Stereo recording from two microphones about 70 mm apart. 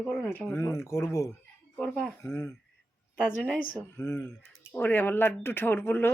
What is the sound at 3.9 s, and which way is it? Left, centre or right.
Speech, left.